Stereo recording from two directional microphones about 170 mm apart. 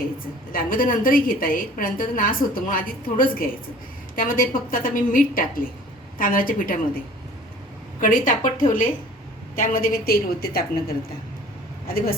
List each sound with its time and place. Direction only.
0.5 s a woman's voice: 55° left (ahead or behind)
8.0 s a woman's voice: 55° left (ahead or behind)